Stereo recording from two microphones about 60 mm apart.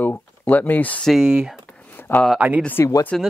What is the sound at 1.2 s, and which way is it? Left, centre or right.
Speech, centre.